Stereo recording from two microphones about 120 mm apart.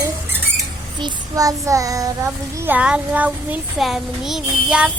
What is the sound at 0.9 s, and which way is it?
Child singing, 35° right (ahead or behind).